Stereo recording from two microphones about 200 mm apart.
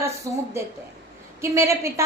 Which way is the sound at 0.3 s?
15° right (ahead or behind).